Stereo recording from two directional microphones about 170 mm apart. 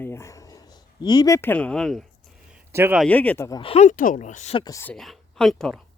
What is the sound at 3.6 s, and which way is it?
Speech, 40° left (ahead or behind).